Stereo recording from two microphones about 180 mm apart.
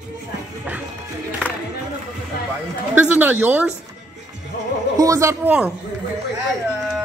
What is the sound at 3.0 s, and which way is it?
Speech, 10° right (ahead or behind).